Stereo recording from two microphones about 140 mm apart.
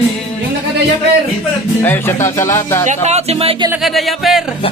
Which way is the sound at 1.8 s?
15° left (ahead or behind).